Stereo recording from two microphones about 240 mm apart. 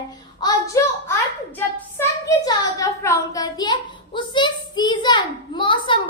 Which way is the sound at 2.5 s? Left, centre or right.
Centre.